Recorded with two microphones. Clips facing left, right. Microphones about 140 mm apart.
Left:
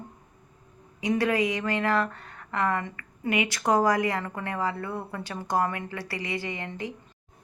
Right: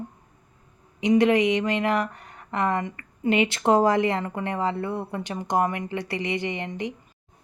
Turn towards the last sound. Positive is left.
turn(degrees=-20)  # may be behind; listen again after turning